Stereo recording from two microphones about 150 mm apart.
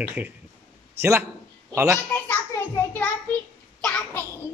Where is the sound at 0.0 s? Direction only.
10° right (ahead or behind).